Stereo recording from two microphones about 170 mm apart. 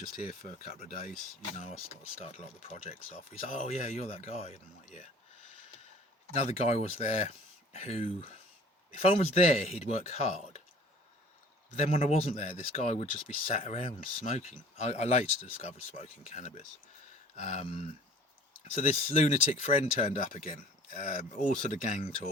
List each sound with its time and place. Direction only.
0.2 s speech: 50° left (ahead or behind)
0.8 s speech: 40° left (ahead or behind)
2.2 s speech: 40° left (ahead or behind)
6.3 s speech: 40° left (ahead or behind)
11.7 s speech: 40° left (ahead or behind)